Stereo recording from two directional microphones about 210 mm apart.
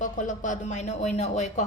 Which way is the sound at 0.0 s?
35° left (ahead or behind).